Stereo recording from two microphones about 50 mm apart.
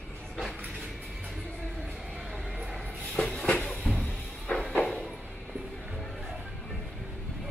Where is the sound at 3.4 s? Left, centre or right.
Centre.